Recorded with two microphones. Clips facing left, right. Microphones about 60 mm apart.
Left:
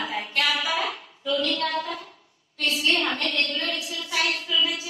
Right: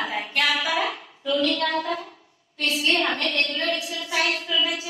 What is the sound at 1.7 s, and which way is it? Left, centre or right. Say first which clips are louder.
Speech: right 3 dB; centre.